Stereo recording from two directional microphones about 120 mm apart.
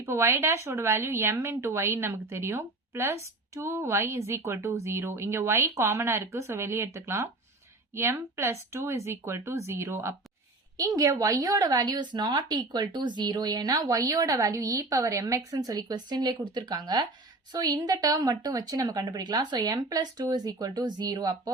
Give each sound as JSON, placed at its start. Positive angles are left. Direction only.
{"t": 0.0, "sound": "a woman's voice", "side_deg": -25}